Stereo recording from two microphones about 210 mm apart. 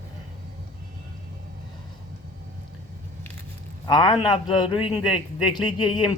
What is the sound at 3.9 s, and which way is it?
A man's voice, 25° left (ahead or behind).